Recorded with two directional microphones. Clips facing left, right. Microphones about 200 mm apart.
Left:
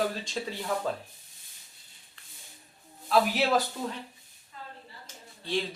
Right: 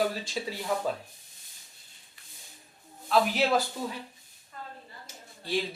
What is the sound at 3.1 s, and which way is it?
Speech, centre (ahead or behind).